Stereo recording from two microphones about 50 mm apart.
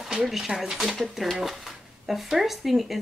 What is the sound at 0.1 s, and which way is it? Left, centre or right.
Speech, centre.